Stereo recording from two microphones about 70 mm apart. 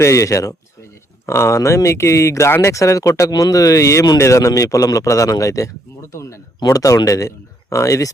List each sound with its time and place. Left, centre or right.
0.0 s speech: left